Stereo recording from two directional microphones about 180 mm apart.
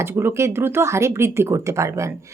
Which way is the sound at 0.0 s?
15° right (ahead or behind).